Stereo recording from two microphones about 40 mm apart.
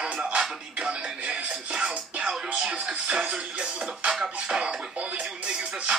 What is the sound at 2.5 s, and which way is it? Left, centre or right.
Music, right.